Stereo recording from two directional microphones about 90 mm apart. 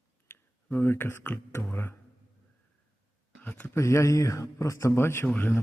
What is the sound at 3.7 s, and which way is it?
Speech, 35° left (ahead or behind).